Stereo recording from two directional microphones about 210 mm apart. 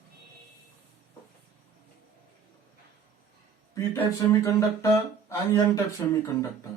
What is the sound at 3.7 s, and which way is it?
Speech, 15° left (ahead or behind).